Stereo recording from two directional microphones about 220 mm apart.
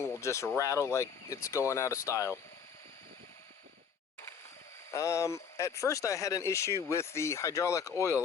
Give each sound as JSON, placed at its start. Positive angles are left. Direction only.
{"t": 0.0, "sound": "speech", "side_deg": 15}
{"t": 4.9, "sound": "speech", "side_deg": 15}